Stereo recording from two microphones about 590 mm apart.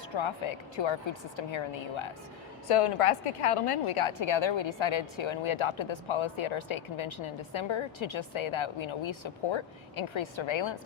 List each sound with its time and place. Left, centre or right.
0.1 s a woman's voice: left